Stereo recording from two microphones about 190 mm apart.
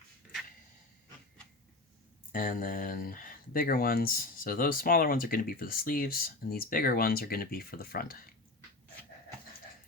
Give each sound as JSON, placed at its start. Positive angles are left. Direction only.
{"t": 2.3, "sound": "speech", "side_deg": 45}